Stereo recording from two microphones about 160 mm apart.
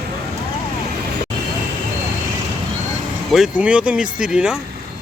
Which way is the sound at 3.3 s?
5° right (ahead or behind).